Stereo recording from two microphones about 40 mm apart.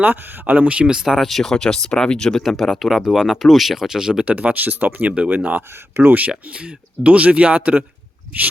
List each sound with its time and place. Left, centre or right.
0.0 s speech: right
1.2 s speech: centre
2.4 s speech: centre
4.3 s speech: right
5.0 s speech: right
5.4 s speech: right
6.0 s speech: right
7.0 s speech: right